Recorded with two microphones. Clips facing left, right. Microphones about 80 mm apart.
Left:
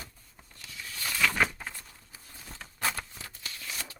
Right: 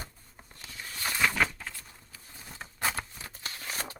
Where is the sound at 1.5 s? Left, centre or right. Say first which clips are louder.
Left 1 dB; centre.